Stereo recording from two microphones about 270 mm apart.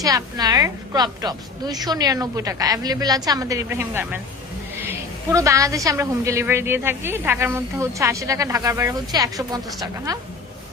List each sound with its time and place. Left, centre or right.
0.0 s a woman's voice: centre